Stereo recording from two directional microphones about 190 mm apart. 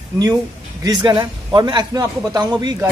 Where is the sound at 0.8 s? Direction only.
20° right (ahead or behind).